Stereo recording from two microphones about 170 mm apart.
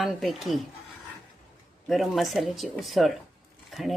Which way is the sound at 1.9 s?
Centre (ahead or behind).